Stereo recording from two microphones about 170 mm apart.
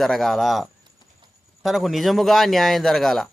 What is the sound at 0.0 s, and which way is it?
A man's voice, centre (ahead or behind).